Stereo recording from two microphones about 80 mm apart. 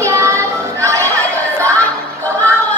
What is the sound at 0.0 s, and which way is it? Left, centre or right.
Child singing, right.